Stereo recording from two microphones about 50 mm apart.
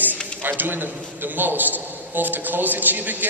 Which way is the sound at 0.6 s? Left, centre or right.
Right.